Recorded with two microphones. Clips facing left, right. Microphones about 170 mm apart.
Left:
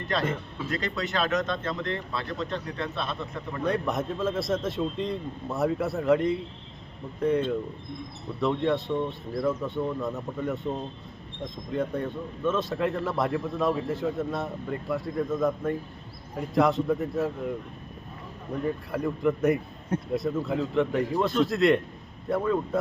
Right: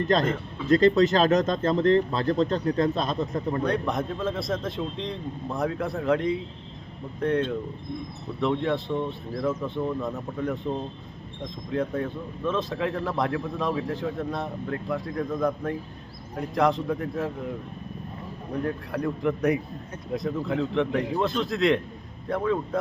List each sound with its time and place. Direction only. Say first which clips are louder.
0.7 s speech: right 13 dB; 40° right (ahead or behind)
3.7 s a man's voice: right 1 dB; centre (ahead or behind)
18.6 s a man's voice: even; centre (ahead or behind)